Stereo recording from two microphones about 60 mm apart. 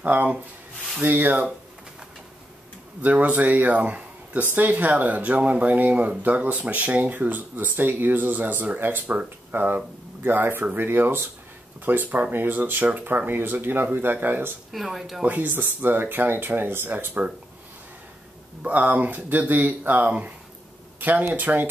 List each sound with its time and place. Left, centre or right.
0.0 s speech: right
3.0 s speech: right
14.7 s speech: centre
15.2 s speech: right
18.6 s speech: right